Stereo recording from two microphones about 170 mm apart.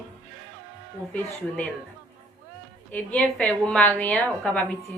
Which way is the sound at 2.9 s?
10° left (ahead or behind).